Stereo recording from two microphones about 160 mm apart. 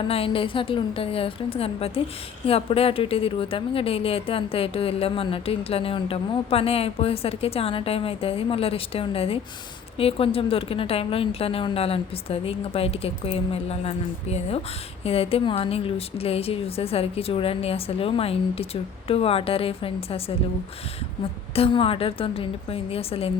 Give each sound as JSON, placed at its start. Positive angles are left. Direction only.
{"t": 0.1, "sound": "a woman's voice", "side_deg": 35}
{"t": 21.5, "sound": "a woman's voice", "side_deg": 35}